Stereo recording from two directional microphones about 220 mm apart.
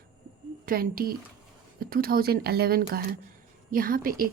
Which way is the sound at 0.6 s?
40° right (ahead or behind).